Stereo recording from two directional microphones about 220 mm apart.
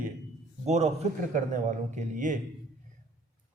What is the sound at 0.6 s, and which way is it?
A man's voice, 30° right (ahead or behind).